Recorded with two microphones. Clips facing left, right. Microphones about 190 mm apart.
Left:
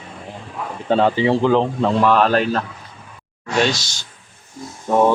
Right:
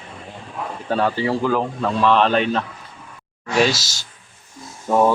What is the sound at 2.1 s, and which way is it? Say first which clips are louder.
Speech: left 1 dB; 5° left (ahead or behind).